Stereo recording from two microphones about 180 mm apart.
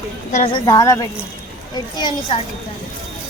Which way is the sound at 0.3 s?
40° left (ahead or behind).